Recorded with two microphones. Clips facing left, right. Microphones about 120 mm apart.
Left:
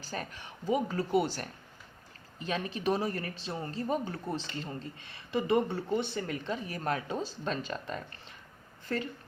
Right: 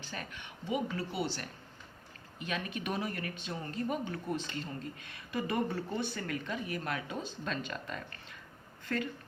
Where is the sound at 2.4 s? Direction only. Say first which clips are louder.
Left 5 dB; 30° left (ahead or behind).